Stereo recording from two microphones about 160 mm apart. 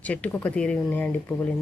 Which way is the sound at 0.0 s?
10° left (ahead or behind).